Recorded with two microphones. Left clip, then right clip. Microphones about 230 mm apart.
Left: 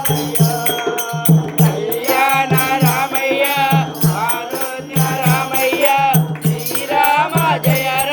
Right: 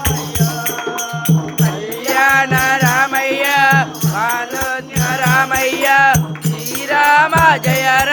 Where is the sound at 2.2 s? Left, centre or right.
Right.